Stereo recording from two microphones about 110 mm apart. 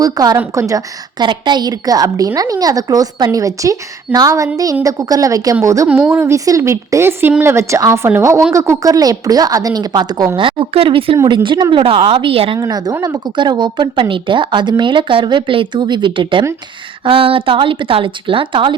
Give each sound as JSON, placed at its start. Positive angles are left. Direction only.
{"t": 0.0, "sound": "a woman's voice", "side_deg": -35}
{"t": 1.2, "sound": "a woman's voice", "side_deg": -45}
{"t": 10.3, "sound": "a woman's voice", "side_deg": -55}
{"t": 11.4, "sound": "a woman's voice", "side_deg": -45}
{"t": 12.5, "sound": "a woman's voice", "side_deg": -35}
{"t": 13.3, "sound": "a woman's voice", "side_deg": -45}